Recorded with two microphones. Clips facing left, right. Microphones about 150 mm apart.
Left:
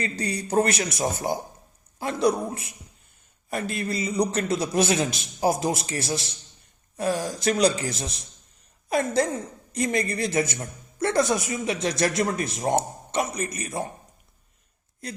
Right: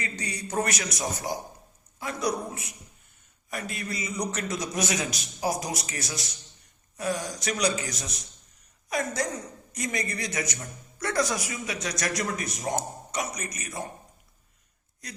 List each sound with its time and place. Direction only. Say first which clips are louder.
0.0 s speech: left 6 dB; 35° left (ahead or behind)